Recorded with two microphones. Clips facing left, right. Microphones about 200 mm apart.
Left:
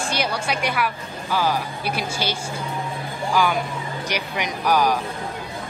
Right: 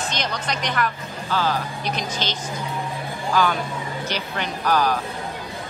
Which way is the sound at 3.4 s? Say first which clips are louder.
Even; 10° left (ahead or behind).